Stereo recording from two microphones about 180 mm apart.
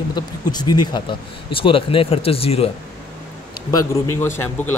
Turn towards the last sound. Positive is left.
turn(degrees=15)  # may be behind; listen again after turning